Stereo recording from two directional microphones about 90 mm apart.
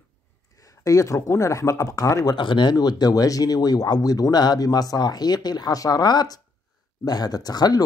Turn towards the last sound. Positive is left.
turn(degrees=50)  # may be behind; listen again after turning